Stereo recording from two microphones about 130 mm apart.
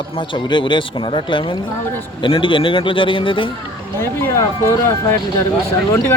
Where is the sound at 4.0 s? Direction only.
20° left (ahead or behind).